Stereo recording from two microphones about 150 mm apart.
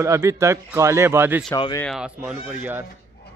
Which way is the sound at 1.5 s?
30° left (ahead or behind).